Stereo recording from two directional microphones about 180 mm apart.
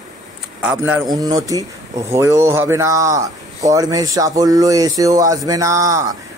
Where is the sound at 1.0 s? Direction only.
20° right (ahead or behind).